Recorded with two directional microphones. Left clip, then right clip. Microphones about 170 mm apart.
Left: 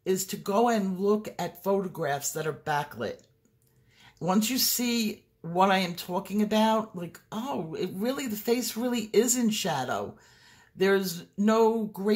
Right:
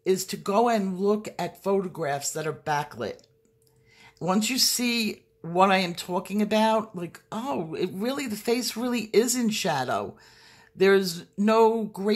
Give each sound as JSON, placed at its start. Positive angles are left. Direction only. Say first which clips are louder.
{"t": 0.0, "sound": "speech", "louder": "right 4 dB", "side_deg": -25}
{"t": 4.2, "sound": "speech", "louder": "right 3 dB", "side_deg": -20}